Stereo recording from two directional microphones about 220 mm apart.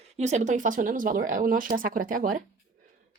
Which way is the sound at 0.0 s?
30° right (ahead or behind).